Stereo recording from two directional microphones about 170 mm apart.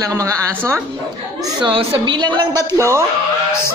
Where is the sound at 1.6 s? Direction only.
30° right (ahead or behind).